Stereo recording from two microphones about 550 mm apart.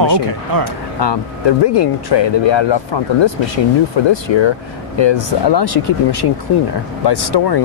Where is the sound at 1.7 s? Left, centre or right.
Left.